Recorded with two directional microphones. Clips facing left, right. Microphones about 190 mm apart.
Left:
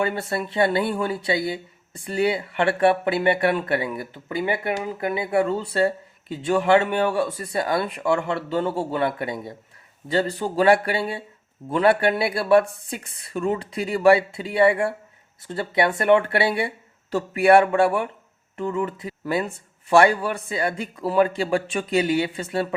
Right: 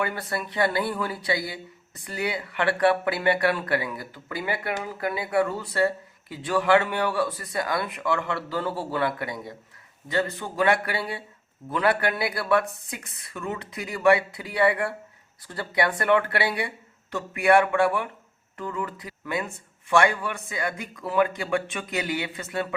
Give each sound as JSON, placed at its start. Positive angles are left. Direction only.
{"t": 0.0, "sound": "speech", "side_deg": 25}